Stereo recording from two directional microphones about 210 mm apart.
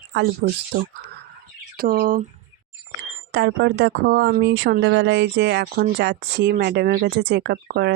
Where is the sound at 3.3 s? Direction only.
60° right (ahead or behind).